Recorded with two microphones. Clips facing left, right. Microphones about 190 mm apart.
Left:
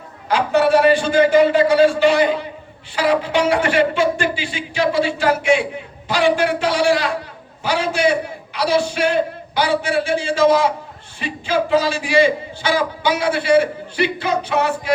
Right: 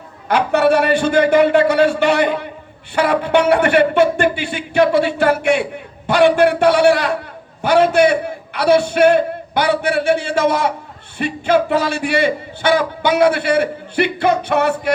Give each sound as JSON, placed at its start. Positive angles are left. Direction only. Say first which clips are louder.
{"t": 0.3, "sound": "speech", "louder": "right 1 dB", "side_deg": -60}